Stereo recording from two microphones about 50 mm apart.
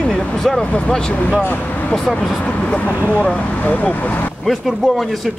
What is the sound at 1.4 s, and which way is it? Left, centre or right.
Speech, left.